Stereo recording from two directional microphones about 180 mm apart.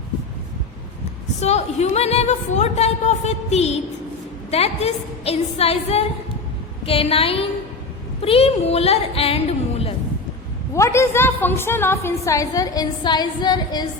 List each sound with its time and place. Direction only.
1.4 s a woman's voice: 35° left (ahead or behind)
10.8 s a woman's voice: 15° left (ahead or behind)